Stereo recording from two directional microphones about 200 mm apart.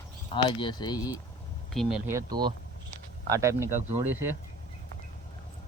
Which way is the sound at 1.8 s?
5° right (ahead or behind).